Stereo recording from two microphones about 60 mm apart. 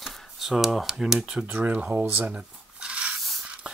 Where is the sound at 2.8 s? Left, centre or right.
Centre.